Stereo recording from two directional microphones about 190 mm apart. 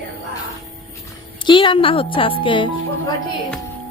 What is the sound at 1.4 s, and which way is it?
Speech, 25° left (ahead or behind).